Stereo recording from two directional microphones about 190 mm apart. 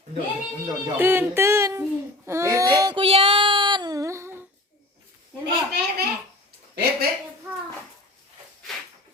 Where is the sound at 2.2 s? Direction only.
15° right (ahead or behind).